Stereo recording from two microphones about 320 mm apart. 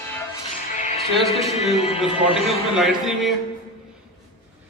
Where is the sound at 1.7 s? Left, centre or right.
Centre.